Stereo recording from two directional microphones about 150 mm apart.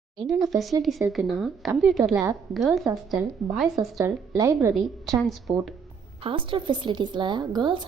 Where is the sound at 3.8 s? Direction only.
20° right (ahead or behind).